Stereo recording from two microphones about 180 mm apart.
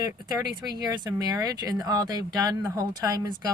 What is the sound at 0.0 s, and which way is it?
Speech, 20° right (ahead or behind).